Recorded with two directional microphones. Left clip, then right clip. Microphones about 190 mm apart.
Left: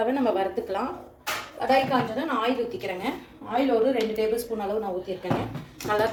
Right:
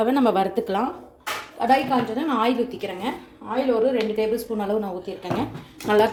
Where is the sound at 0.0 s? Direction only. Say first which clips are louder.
Right 4 dB; 40° right (ahead or behind).